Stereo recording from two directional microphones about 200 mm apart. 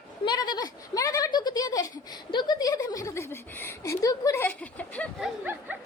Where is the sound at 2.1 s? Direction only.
20° left (ahead or behind).